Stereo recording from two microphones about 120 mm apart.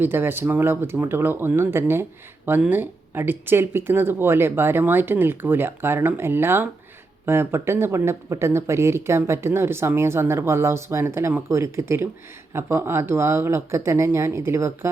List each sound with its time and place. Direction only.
0.0 s speech: 20° right (ahead or behind)